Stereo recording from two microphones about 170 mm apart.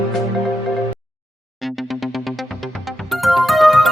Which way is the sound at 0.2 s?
Centre (ahead or behind).